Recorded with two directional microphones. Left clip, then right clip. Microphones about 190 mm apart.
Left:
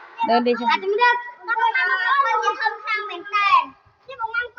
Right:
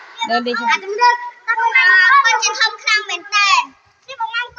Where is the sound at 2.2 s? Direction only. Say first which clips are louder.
Right 5 dB; 5° left (ahead or behind).